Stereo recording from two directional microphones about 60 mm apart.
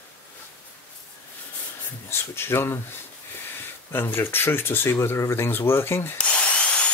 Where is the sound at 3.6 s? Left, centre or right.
Left.